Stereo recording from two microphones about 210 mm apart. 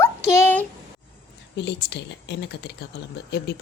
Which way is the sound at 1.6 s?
55° left (ahead or behind).